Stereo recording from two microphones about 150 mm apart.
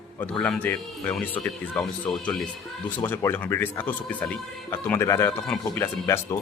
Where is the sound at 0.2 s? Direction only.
5° left (ahead or behind).